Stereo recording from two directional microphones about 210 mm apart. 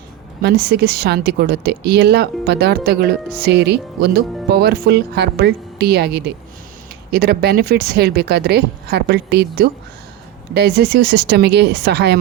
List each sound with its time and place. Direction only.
0.4 s speech: 50° right (ahead or behind)